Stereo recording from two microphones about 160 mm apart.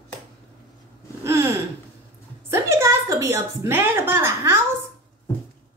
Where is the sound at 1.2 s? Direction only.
15° right (ahead or behind).